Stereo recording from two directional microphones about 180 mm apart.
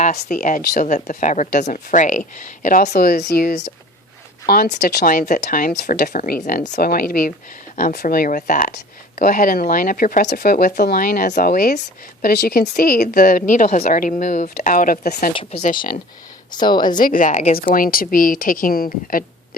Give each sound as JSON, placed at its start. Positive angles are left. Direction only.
{"t": 0.0, "sound": "speech", "side_deg": 40}
{"t": 5.3, "sound": "speech", "side_deg": 45}
{"t": 5.7, "sound": "speech", "side_deg": 65}
{"t": 6.7, "sound": "speech", "side_deg": 60}
{"t": 16.6, "sound": "a woman's voice", "side_deg": 25}
{"t": 17.0, "sound": "speech", "side_deg": 50}